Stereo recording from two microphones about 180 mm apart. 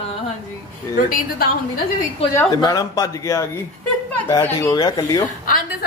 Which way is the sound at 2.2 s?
35° left (ahead or behind).